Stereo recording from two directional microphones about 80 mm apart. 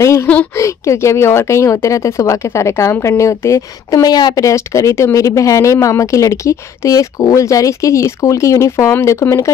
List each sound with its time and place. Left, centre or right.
0.0 s speech: left